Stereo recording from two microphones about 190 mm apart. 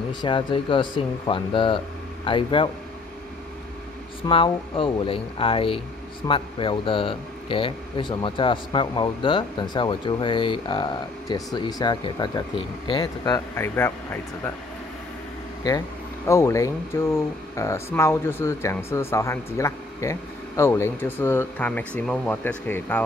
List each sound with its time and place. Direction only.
0.1 s speech: 25° left (ahead or behind)
4.3 s speech: 30° left (ahead or behind); by 14.5 s 10° left (ahead or behind)
16.3 s speech: 15° left (ahead or behind)